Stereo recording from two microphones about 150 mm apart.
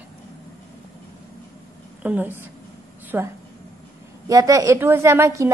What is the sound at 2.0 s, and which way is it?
A woman's voice, 10° right (ahead or behind).